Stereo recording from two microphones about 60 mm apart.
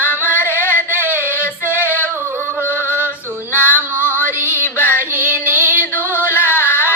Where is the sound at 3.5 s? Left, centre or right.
Left.